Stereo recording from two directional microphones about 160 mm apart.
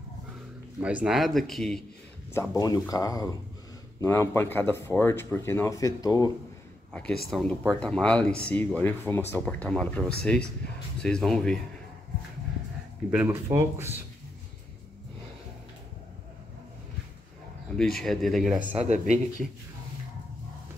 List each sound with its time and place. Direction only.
0.8 s speech: 5° right (ahead or behind)
2.5 s speech: 25° left (ahead or behind)
6.9 s speech: 5° left (ahead or behind)
13.1 s speech: 10° right (ahead or behind)
17.7 s speech: centre (ahead or behind)
18.8 s speech: 50° right (ahead or behind)